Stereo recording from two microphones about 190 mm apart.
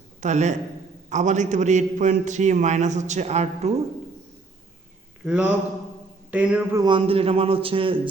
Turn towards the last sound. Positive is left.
turn(degrees=-30)  # may be behind; listen again after turning